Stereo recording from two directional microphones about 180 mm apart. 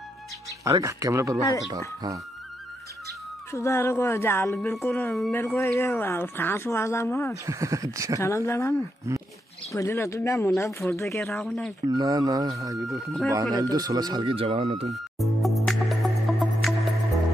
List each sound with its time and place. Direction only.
0.7 s speech: 15° right (ahead or behind)
3.5 s speech: 15° left (ahead or behind)
7.4 s speech: 20° right (ahead or behind)
8.2 s speech: 15° left (ahead or behind)
9.1 s speech: 15° right (ahead or behind)
9.7 s speech: 15° left (ahead or behind)
11.3 s speech: 5° left (ahead or behind)
11.9 s speech: 20° right (ahead or behind)
14.9 s music: centre (ahead or behind)